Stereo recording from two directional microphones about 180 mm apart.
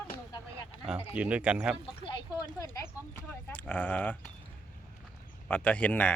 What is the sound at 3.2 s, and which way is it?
Speech, 10° left (ahead or behind).